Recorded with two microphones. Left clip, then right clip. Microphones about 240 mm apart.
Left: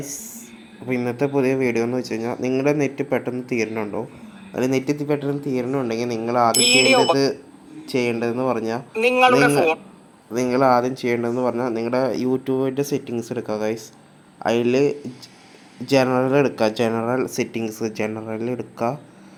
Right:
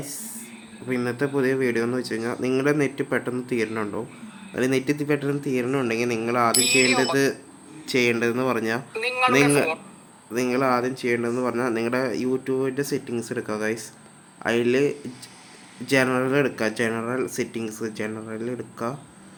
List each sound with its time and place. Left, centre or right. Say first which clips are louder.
0.9 s a man's voice: left 3 dB; centre
6.6 s speech: left 5 dB; right
7.9 s a man's voice: even; centre
10.3 s a man's voice: left 5 dB; centre